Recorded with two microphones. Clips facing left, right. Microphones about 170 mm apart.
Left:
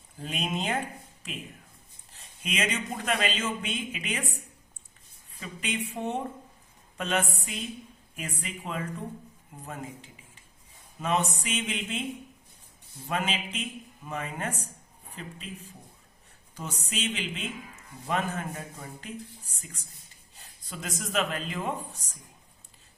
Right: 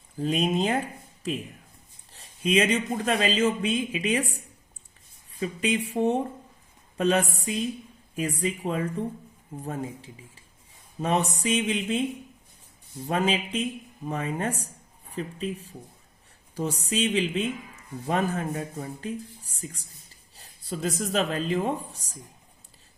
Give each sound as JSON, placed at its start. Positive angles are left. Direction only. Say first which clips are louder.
{"t": 0.2, "sound": "speech", "louder": "right 8 dB", "side_deg": -35}
{"t": 2.1, "sound": "speech", "louder": "right 10 dB", "side_deg": -35}
{"t": 5.4, "sound": "speech", "louder": "right 7 dB", "side_deg": -35}
{"t": 13.1, "sound": "speech", "louder": "right 6 dB", "side_deg": -35}